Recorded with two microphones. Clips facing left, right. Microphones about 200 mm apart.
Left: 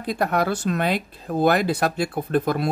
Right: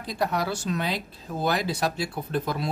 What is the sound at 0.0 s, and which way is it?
A man's voice, 55° left (ahead or behind).